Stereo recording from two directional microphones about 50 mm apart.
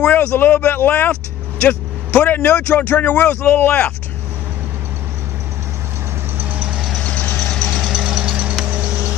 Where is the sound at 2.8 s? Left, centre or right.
Left.